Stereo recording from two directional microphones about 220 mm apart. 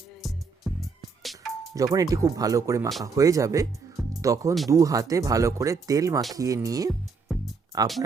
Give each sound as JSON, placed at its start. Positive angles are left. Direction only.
{"t": 0.2, "sound": "music", "side_deg": 0}
{"t": 1.7, "sound": "speech", "side_deg": -15}